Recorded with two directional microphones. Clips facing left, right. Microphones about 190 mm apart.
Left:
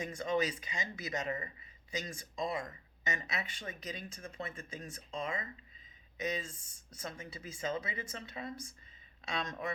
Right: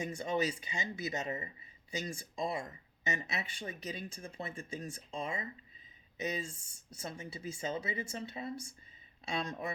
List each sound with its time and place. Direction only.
0.1 s speech: 30° right (ahead or behind)